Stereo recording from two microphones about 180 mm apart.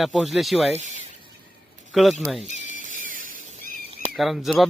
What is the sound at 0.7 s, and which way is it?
Speech, 40° right (ahead or behind).